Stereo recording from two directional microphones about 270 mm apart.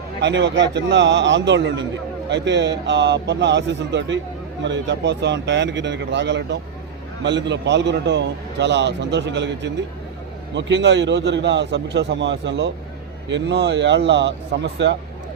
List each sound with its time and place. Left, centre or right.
0.2 s a man's voice: right